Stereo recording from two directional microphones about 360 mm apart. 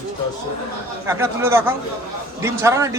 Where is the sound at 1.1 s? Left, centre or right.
Centre.